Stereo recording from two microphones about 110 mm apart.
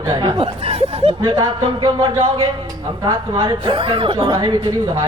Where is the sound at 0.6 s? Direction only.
65° right (ahead or behind).